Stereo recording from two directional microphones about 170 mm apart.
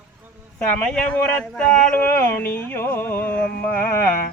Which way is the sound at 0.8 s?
5° left (ahead or behind).